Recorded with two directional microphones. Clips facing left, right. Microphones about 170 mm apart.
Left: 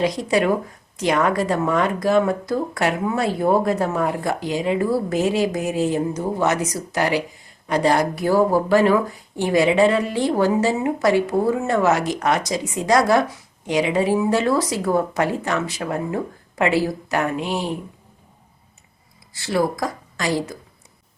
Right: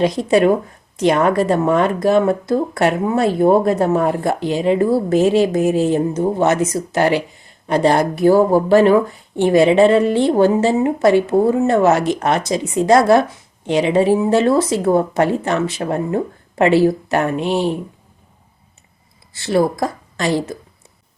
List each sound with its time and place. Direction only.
0.0 s speech: 25° right (ahead or behind)
19.3 s speech: 25° right (ahead or behind)